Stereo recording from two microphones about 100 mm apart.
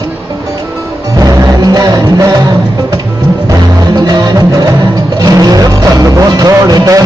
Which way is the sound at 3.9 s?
45° right (ahead or behind).